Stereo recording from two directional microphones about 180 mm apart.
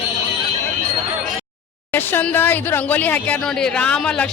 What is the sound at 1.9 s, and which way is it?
Speech, 10° left (ahead or behind).